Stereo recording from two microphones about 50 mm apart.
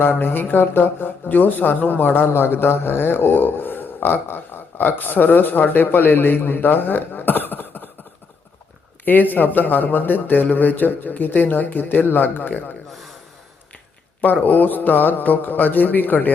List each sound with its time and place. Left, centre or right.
0.0 s speech: left
9.3 s speech: left
12.9 s gasp: centre
14.2 s speech: left